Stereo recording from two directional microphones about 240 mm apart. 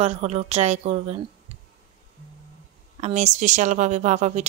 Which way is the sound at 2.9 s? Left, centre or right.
Right.